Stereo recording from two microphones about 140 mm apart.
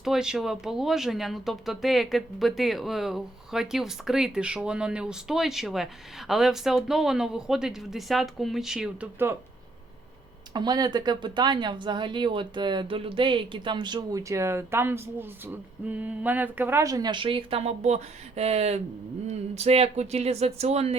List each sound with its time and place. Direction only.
0.0 s speech: 5° right (ahead or behind)
10.5 s speech: 30° right (ahead or behind); by 20.9 s 50° right (ahead or behind)